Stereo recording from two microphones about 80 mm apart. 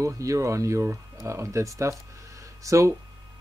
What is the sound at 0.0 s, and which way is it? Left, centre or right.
Speech, right.